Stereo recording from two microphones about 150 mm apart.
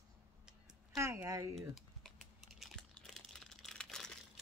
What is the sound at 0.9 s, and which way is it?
Speech, 20° right (ahead or behind).